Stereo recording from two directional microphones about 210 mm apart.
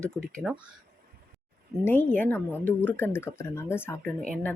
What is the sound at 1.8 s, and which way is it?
Speech, 10° left (ahead or behind).